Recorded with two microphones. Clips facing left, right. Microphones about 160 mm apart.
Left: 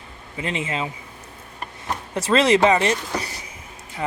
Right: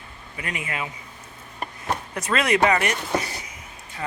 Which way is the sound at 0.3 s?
25° left (ahead or behind).